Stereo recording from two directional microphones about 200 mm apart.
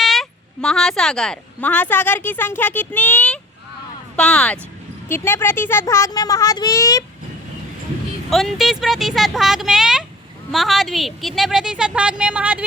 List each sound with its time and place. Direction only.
0.0 s a woman's voice: centre (ahead or behind); by 7.0 s 15° left (ahead or behind)
8.3 s a woman's voice: centre (ahead or behind)